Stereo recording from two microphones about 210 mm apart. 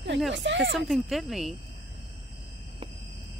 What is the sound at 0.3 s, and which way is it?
Speech, 60° right (ahead or behind).